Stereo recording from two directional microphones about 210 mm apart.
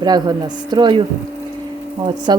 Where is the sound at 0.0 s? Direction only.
20° right (ahead or behind).